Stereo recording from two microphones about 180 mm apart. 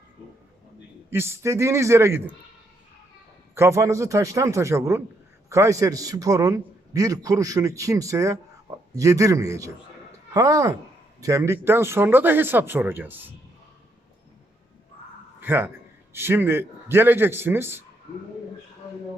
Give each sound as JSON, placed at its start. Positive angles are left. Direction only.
{"t": 1.1, "sound": "speech", "side_deg": -15}
{"t": 3.5, "sound": "a man's voice", "side_deg": -15}
{"t": 15.4, "sound": "a man's voice", "side_deg": -10}